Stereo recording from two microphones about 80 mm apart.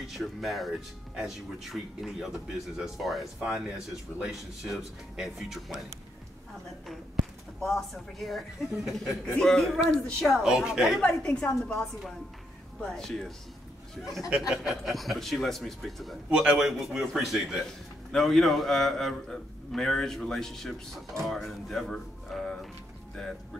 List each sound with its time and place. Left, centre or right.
0.1 s a man's voice: centre
3.3 s a man's voice: centre
7.6 s a man's voice: centre
10.5 s a man's voice: centre
11.0 s a woman's voice: centre
12.8 s a man's voice: centre
14.5 s a man's voice: centre
16.3 s a man's voice: centre